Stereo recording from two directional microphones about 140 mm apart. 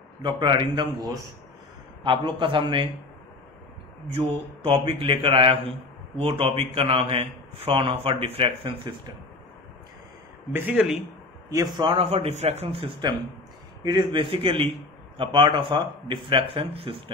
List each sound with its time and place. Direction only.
0.2 s speech: 30° right (ahead or behind)
4.1 s speech: 40° right (ahead or behind)
10.5 s speech: 15° right (ahead or behind)
11.5 s speech: 30° right (ahead or behind)
12.1 s speech: 50° right (ahead or behind)